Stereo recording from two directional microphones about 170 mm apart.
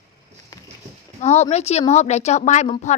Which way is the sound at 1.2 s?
40° left (ahead or behind).